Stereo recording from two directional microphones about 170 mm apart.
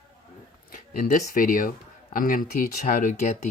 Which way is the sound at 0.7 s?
50° left (ahead or behind).